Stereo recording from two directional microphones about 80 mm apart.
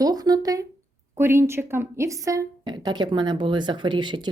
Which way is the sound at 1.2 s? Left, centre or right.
Right.